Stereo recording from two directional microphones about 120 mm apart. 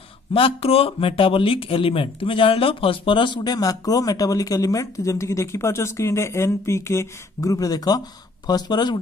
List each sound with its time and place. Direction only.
0.3 s speech: 50° left (ahead or behind); by 8.9 s 35° left (ahead or behind)